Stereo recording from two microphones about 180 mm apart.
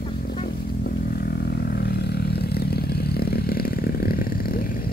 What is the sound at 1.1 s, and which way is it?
Vehicle, 60° left (ahead or behind).